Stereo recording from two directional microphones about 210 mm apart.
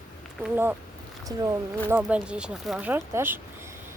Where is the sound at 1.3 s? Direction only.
20° right (ahead or behind).